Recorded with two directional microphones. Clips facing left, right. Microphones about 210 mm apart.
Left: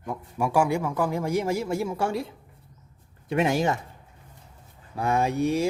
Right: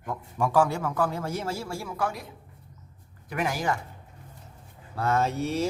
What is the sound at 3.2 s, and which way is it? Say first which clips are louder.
Speech: left 5 dB; 25° left (ahead or behind).